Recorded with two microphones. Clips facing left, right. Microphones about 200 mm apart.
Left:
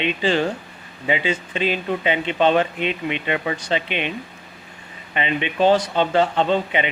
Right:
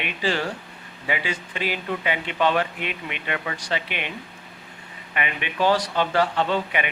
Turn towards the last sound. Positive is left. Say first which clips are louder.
# left 4 dB
turn(degrees=20)  # may be behind; listen again after turning